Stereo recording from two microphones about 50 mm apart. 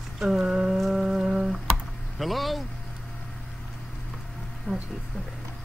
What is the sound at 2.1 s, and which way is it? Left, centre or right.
Vehicle, centre.